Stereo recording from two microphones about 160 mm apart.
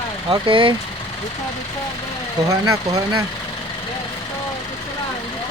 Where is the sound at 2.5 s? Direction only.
20° right (ahead or behind).